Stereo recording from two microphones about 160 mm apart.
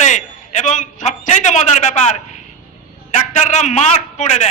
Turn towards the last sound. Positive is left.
turn(degrees=45)  # may be behind; listen again after turning